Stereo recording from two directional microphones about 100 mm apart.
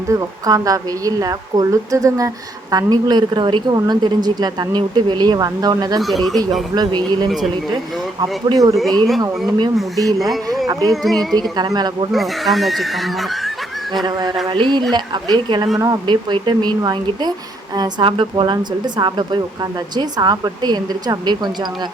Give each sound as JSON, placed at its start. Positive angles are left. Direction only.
{"t": 0.1, "sound": "a woman's voice", "side_deg": -35}
{"t": 6.0, "sound": "speech", "side_deg": 0}
{"t": 6.7, "sound": "a woman's voice", "side_deg": -45}
{"t": 8.7, "sound": "speech", "side_deg": 0}
{"t": 10.7, "sound": "a woman's voice", "side_deg": -35}
{"t": 10.9, "sound": "speech", "side_deg": 0}
{"t": 11.5, "sound": "speech", "side_deg": -45}
{"t": 12.1, "sound": "speech", "side_deg": 0}
{"t": 14.0, "sound": "speech", "side_deg": -45}